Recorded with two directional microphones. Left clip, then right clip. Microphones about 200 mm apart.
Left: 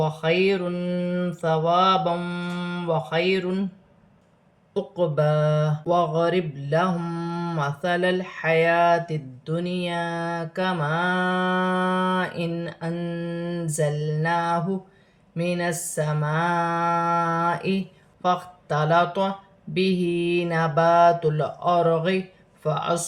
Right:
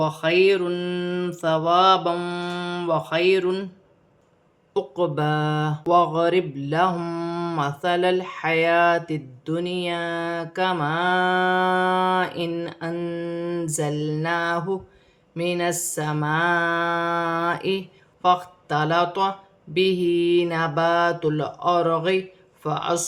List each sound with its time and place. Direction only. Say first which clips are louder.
0.0 s mantra: right 3 dB; 45° right (ahead or behind)
4.7 s mantra: right 1 dB; 30° right (ahead or behind)